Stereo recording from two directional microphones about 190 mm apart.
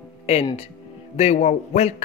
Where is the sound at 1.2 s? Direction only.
35° left (ahead or behind).